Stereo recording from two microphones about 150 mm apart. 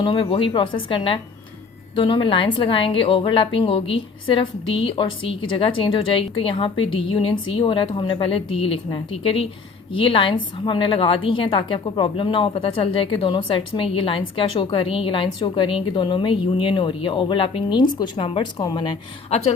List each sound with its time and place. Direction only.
0.0 s a woman's voice: 35° left (ahead or behind)